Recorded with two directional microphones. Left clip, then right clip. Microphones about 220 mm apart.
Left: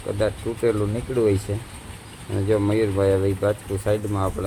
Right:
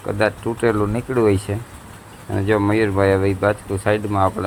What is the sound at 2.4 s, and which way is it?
Speech, 5° right (ahead or behind).